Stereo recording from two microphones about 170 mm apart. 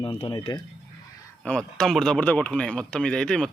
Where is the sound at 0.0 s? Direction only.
30° left (ahead or behind).